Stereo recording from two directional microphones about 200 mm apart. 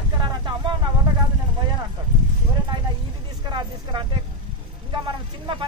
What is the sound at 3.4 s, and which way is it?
Vehicle, 20° right (ahead or behind).